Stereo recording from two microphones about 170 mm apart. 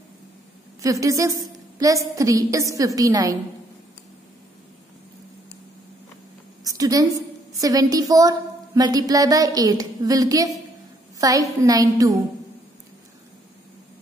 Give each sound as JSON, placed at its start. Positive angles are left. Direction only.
{"t": 0.8, "sound": "a woman's voice", "side_deg": -20}
{"t": 6.6, "sound": "a sound", "side_deg": -20}
{"t": 7.5, "sound": "a woman's voice", "side_deg": -20}